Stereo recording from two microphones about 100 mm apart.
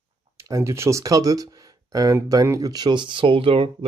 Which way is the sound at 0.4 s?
30° right (ahead or behind).